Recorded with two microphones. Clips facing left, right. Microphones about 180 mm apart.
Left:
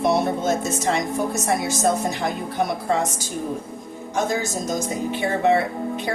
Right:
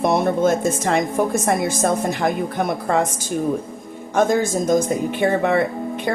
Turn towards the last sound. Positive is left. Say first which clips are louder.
# right 1 dB
turn(degrees=-55)  # may be behind; listen again after turning